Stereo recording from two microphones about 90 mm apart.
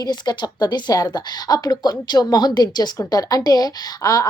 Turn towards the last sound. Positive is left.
turn(degrees=40)  # may be behind; listen again after turning